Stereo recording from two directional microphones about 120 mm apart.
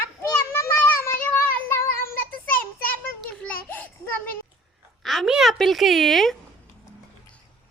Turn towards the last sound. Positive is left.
turn(degrees=0)  # may be behind; listen again after turning